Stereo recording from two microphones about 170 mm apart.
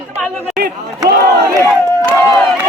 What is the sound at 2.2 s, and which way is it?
Speech, 15° left (ahead or behind).